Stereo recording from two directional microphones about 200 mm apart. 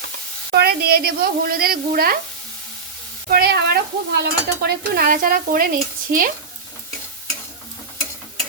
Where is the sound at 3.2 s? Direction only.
50° right (ahead or behind).